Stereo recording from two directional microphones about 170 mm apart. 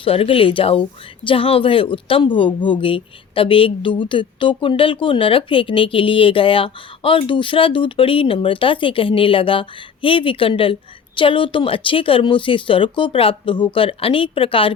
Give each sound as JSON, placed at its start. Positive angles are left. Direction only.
{"t": 0.0, "sound": "speech", "side_deg": 35}